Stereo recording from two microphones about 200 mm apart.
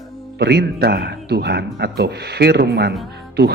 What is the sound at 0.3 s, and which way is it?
A man's voice, 55° right (ahead or behind).